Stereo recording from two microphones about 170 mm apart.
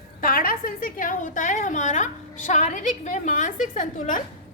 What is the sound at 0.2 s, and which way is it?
A woman's voice, 55° left (ahead or behind).